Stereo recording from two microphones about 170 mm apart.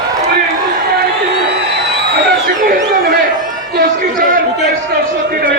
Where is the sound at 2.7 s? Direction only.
60° right (ahead or behind).